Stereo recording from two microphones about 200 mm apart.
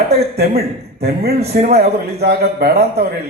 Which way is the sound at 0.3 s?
50° right (ahead or behind).